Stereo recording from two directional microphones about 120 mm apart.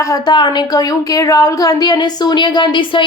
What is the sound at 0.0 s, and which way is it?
A woman's voice, 35° left (ahead or behind).